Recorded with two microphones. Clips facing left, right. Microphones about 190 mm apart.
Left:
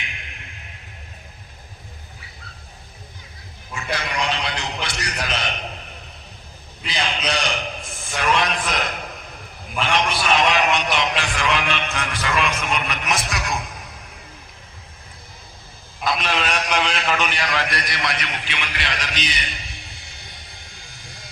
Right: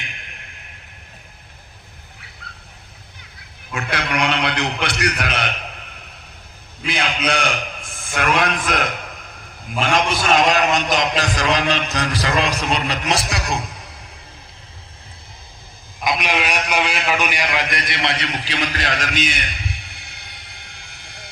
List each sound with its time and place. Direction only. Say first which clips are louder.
3.7 s a man's voice: right 4 dB; 65° right (ahead or behind)
6.8 s a sound: right 3 dB; 55° right (ahead or behind)
9.7 s a man's voice: right 3 dB; 45° right (ahead or behind)
16.0 s a man's voice: right 2 dB; 15° right (ahead or behind); by 21.2 s 65° right (ahead or behind)